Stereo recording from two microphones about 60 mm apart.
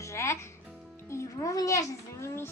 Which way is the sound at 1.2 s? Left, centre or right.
Left.